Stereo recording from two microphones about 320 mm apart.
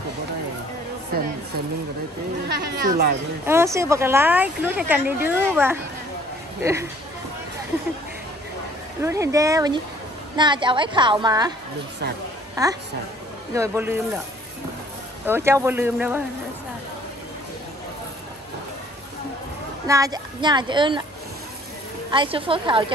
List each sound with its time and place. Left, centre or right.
1.1 s speech: right
2.4 s speech: right
3.4 s speech: centre
9.0 s speech: centre
12.6 s speech: centre
15.2 s speech: centre
19.9 s speech: centre
22.1 s speech: centre